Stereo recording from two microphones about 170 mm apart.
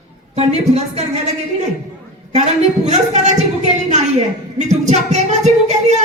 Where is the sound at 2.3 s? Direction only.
40° right (ahead or behind).